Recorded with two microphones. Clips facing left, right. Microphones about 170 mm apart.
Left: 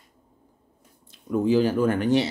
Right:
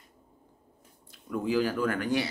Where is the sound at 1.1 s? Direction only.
25° left (ahead or behind).